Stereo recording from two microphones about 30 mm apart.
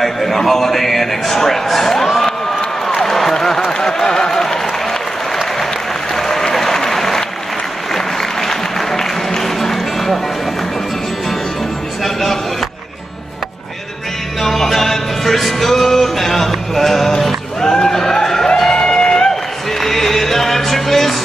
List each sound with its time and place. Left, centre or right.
0.0 s a man's voice: centre
2.9 s a sound: centre
4.3 s applause: centre
6.1 s applause: centre
7.9 s music: centre
12.0 s a sound: centre
14.4 s music: centre
17.6 s a sound: left
18.2 s music: centre
19.8 s music: centre